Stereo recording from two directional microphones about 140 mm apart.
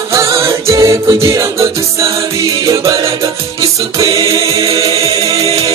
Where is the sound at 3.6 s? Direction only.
25° right (ahead or behind).